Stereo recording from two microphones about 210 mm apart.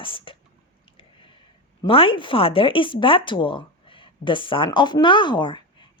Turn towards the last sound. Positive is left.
turn(degrees=20)  # may be behind; listen again after turning